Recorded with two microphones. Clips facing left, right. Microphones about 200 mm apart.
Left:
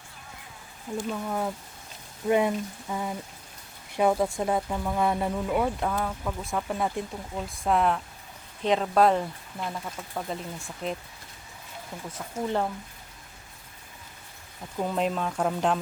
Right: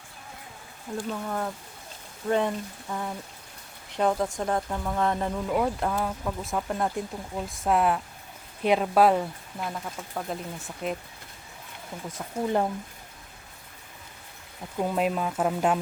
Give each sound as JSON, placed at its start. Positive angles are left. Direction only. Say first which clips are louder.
{"t": 0.9, "sound": "speech", "louder": "left 1 dB", "side_deg": 5}
{"t": 12.1, "sound": "speech", "louder": "right 2 dB", "side_deg": -15}
{"t": 14.8, "sound": "speech", "louder": "right 1 dB", "side_deg": -5}